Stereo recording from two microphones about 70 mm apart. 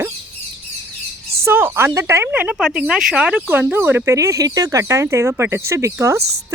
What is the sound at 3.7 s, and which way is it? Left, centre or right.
Speech, right.